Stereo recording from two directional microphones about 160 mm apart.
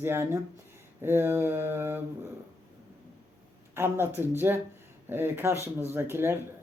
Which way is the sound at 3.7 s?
15° right (ahead or behind).